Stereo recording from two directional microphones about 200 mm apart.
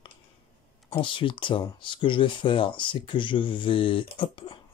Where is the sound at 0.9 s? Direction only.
25° left (ahead or behind).